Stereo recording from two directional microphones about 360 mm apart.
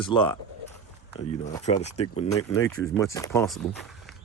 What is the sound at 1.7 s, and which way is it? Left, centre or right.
Speech, left.